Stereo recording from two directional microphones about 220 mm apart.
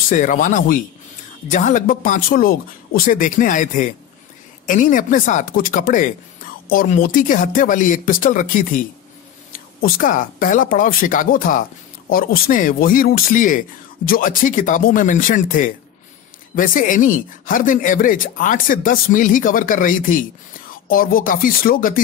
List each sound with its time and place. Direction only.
0.1 s speech: 35° left (ahead or behind)